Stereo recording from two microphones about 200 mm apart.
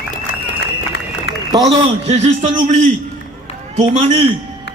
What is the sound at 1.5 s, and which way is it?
Speech, 20° right (ahead or behind).